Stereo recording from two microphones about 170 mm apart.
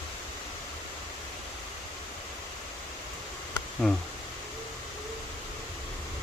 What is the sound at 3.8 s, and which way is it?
Speech, centre (ahead or behind).